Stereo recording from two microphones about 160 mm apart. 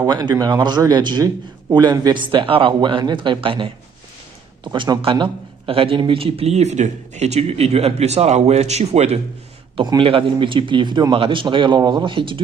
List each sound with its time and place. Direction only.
0.0 s a man's voice: 25° right (ahead or behind); by 9.2 s 40° right (ahead or behind)
9.8 s speech: 30° right (ahead or behind)